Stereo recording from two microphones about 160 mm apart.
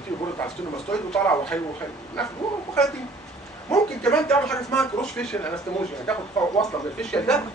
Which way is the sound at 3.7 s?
5° left (ahead or behind).